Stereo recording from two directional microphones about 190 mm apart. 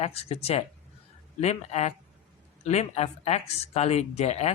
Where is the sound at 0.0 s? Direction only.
35° left (ahead or behind).